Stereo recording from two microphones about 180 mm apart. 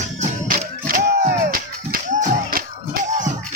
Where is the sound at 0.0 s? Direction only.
40° right (ahead or behind).